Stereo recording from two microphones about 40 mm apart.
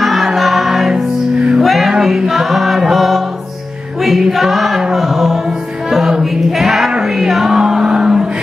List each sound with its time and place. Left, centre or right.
0.0 s choir: centre
1.6 s music: centre
4.3 s choir: centre
4.9 s chant: centre
5.9 s music: centre